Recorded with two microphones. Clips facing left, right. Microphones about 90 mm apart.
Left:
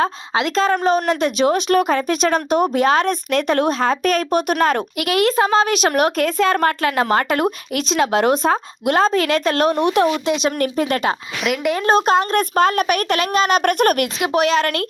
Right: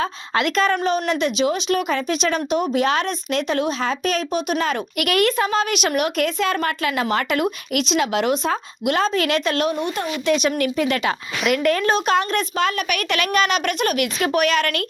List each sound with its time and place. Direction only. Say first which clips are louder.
0.3 s speech: left 1 dB; 30° left (ahead or behind)
0.8 s speech: left 3 dB; 45° left (ahead or behind)
4.9 s speech: even; 25° left (ahead or behind); by 9.7 s 40° left (ahead or behind)
9.7 s speech: left 8 dB; 75° left (ahead or behind)
10.2 s speech: even; 25° left (ahead or behind)
10.6 s speech: left 2 dB; 40° left (ahead or behind)
14.3 s speech: left 4 dB; 30° left (ahead or behind)